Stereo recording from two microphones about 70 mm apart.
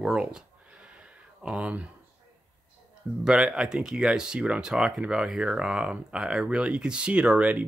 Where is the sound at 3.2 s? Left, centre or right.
Centre.